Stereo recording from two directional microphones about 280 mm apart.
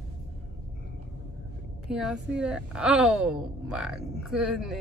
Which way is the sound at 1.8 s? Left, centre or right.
Centre.